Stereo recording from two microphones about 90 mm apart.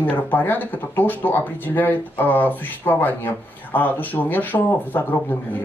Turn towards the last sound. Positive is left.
turn(degrees=20)  # may be behind; listen again after turning